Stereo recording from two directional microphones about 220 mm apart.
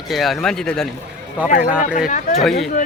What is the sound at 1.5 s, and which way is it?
Speech, 35° left (ahead or behind).